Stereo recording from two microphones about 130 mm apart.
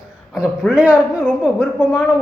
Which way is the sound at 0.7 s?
10° right (ahead or behind).